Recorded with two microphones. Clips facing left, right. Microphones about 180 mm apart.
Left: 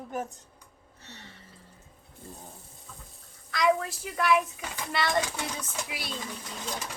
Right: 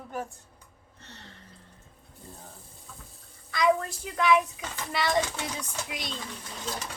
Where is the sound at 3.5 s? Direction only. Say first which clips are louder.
Right 1 dB; centre (ahead or behind).